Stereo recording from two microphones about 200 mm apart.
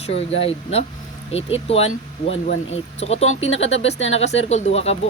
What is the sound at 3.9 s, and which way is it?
Speech, 75° left (ahead or behind).